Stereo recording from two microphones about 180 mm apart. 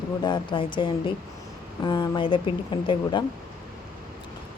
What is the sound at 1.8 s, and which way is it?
Speech, 25° left (ahead or behind).